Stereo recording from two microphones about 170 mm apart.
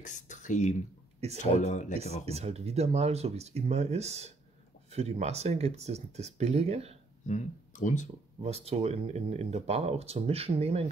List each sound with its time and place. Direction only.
0.0 s speech: 45° left (ahead or behind)
2.2 s speech: 40° right (ahead or behind)
7.2 s speech: 45° left (ahead or behind)
8.4 s speech: 40° right (ahead or behind)